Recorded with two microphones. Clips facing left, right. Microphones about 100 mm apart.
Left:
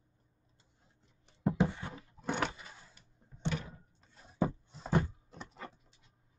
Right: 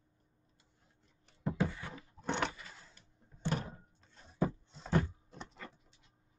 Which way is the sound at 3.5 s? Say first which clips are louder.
Right 3 dB; 35° right (ahead or behind).